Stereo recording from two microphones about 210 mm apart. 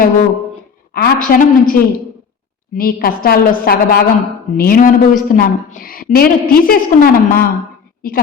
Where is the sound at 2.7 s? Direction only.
45° left (ahead or behind).